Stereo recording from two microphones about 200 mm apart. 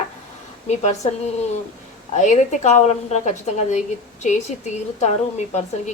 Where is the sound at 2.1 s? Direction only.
35° left (ahead or behind).